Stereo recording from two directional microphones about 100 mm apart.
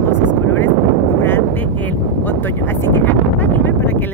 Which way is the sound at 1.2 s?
20° left (ahead or behind).